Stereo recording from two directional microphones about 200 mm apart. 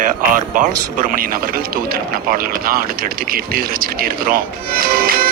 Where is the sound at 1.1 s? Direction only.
45° right (ahead or behind).